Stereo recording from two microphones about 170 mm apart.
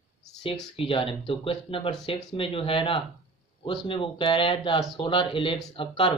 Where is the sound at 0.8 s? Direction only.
30° left (ahead or behind).